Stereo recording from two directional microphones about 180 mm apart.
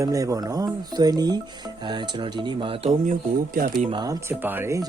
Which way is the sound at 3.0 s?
50° right (ahead or behind).